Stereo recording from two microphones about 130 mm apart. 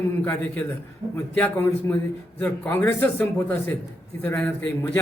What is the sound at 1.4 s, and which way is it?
A man's voice, 15° left (ahead or behind).